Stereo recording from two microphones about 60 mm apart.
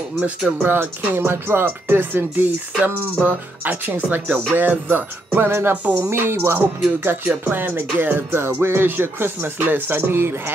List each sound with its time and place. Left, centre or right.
0.2 s speech: centre
0.7 s speech: right